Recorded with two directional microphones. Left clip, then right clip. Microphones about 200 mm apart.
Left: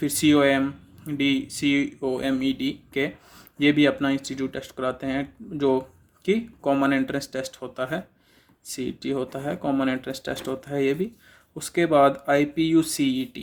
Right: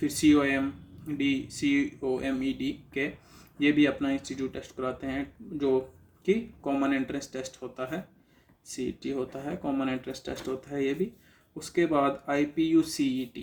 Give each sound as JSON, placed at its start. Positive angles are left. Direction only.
{"t": 0.0, "sound": "speech", "side_deg": 50}